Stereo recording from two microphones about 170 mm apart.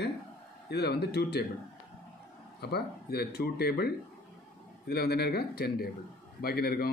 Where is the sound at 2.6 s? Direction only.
70° left (ahead or behind).